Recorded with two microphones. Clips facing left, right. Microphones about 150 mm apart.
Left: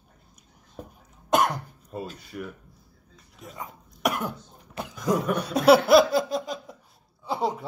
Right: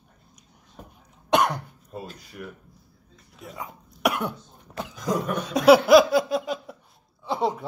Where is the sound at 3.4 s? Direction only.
Centre (ahead or behind).